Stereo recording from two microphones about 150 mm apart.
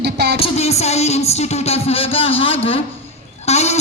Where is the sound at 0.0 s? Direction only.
90° right.